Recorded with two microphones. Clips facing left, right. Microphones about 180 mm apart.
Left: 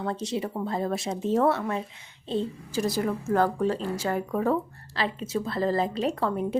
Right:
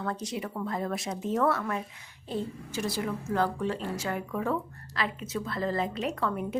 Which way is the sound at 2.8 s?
45° left (ahead or behind).